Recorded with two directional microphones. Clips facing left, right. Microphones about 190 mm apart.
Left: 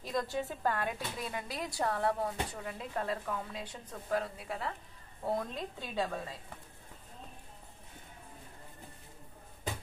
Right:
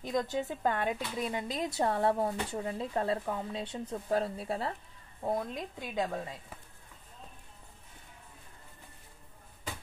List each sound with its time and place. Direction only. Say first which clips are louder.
0.0 s a woman's voice: right 3 dB; 20° right (ahead or behind)
5.2 s a woman's voice: right 2 dB; 15° right (ahead or behind)